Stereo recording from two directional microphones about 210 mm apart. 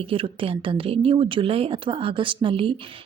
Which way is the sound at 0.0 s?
25° right (ahead or behind).